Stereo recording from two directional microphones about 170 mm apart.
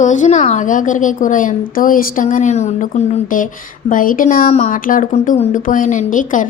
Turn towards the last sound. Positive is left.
turn(degrees=50)  # may be behind; listen again after turning